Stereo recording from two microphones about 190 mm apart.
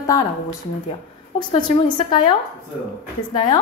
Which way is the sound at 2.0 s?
25° left (ahead or behind).